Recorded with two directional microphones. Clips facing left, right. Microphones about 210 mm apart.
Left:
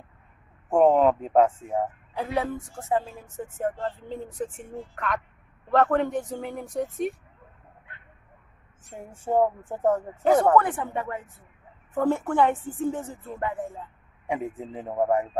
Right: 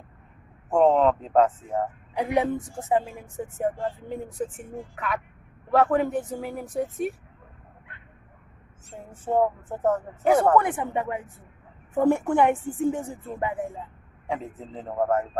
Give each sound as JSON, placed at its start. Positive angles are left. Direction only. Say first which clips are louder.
{"t": 0.8, "sound": "speech", "louder": "even", "side_deg": 10}
{"t": 2.1, "sound": "speech", "louder": "right 4 dB", "side_deg": -15}
{"t": 8.8, "sound": "speech", "louder": "even", "side_deg": 10}
{"t": 10.2, "sound": "speech", "louder": "even", "side_deg": -10}
{"t": 14.3, "sound": "speech", "louder": "left 2 dB", "side_deg": 15}